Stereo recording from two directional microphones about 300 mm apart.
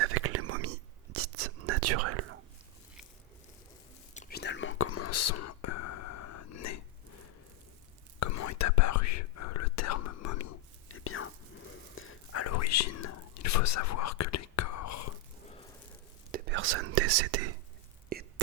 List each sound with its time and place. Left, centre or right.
0.0 s whispering: right
4.1 s whispering: left
8.2 s whispering: left
10.8 s whispering: left
16.3 s whispering: right
18.1 s whispering: right